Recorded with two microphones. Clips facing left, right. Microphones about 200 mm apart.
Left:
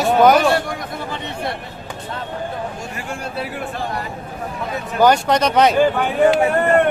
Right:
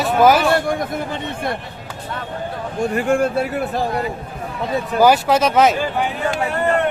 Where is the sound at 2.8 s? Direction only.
55° right (ahead or behind).